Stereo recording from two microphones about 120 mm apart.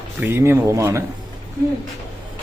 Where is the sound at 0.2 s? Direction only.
20° right (ahead or behind).